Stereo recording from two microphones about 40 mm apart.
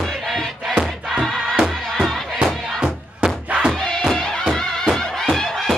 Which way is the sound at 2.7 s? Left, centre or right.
Centre.